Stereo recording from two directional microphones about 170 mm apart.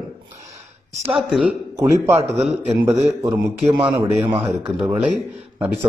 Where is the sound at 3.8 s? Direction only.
30° right (ahead or behind).